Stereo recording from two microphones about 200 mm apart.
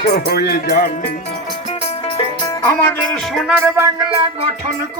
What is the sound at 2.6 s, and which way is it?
Music, 15° left (ahead or behind).